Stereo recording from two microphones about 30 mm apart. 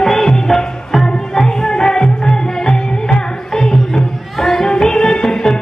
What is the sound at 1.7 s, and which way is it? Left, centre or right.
Music, left.